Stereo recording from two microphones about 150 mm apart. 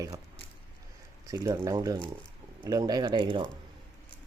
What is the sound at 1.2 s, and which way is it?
Speech, 25° right (ahead or behind).